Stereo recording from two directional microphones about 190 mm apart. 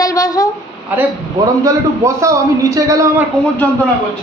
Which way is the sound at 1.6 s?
15° right (ahead or behind).